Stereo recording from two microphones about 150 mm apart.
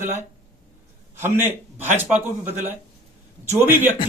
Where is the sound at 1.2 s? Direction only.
15° right (ahead or behind).